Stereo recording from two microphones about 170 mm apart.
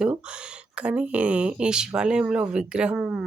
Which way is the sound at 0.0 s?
5° right (ahead or behind).